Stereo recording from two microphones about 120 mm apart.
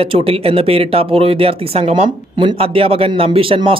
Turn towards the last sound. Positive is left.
turn(degrees=-50)  # may be behind; listen again after turning